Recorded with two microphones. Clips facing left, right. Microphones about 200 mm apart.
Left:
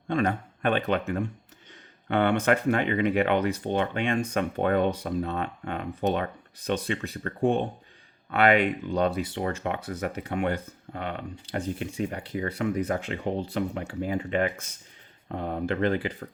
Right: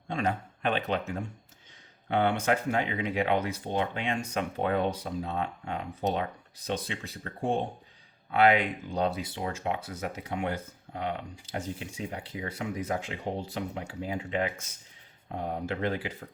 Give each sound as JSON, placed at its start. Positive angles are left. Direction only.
{"t": 0.1, "sound": "a man's voice", "side_deg": 55}